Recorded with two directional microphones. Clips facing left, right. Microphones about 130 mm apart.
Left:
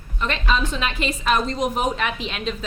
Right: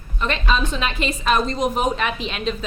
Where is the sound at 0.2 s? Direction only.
30° right (ahead or behind).